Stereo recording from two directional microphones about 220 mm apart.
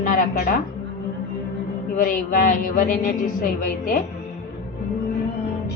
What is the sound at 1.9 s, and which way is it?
A woman's voice, 40° left (ahead or behind).